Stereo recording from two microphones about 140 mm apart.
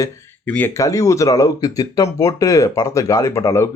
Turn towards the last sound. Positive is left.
turn(degrees=20)  # may be behind; listen again after turning